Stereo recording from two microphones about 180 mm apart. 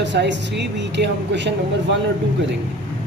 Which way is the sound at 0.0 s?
75° right (ahead or behind).